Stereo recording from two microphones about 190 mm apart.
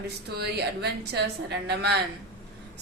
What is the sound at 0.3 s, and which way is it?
A woman's voice, 60° right (ahead or behind).